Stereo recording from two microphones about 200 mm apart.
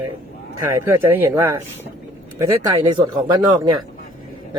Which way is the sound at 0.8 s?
10° right (ahead or behind).